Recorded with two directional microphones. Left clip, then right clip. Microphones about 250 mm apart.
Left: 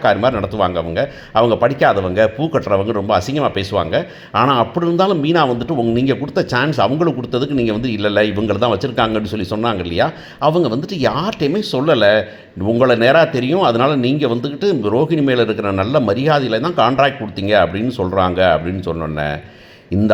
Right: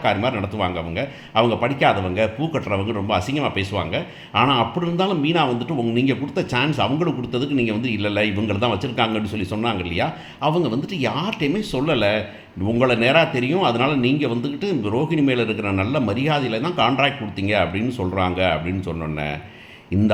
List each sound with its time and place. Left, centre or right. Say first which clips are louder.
0.0 s a man's voice: left 7 dB; centre